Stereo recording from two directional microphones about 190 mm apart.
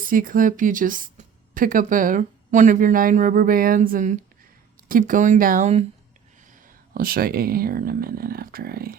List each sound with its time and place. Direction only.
0.0 s speech: 45° right (ahead or behind)
6.5 s speech: 50° right (ahead or behind)